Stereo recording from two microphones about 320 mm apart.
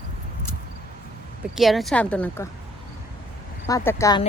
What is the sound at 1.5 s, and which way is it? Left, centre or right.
Speech, centre.